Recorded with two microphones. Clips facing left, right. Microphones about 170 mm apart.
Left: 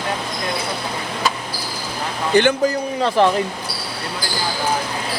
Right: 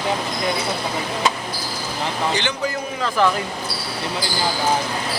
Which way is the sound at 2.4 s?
50° left (ahead or behind).